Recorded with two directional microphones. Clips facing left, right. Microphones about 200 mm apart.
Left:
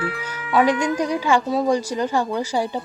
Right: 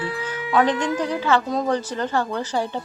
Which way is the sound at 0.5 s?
10° left (ahead or behind).